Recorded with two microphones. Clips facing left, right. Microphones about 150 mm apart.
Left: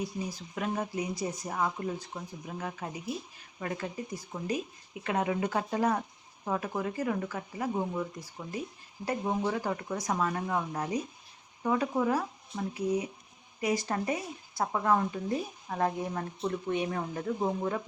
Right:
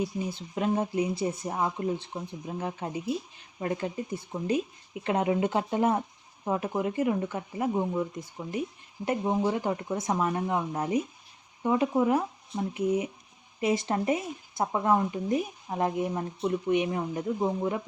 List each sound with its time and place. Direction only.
0.3 s speech: 25° right (ahead or behind)